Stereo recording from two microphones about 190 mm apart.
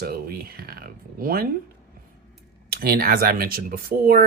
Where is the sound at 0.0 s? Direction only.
50° right (ahead or behind).